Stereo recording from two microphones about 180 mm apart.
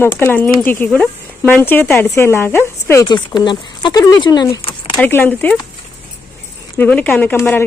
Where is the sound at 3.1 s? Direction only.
25° left (ahead or behind).